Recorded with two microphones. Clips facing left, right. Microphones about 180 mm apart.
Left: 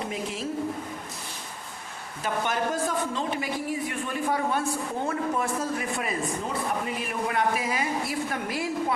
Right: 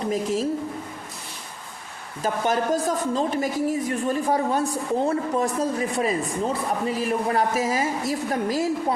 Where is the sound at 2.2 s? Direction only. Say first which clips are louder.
Right 4 dB; 40° right (ahead or behind).